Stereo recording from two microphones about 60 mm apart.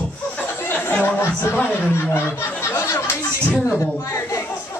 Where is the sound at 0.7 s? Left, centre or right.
Left.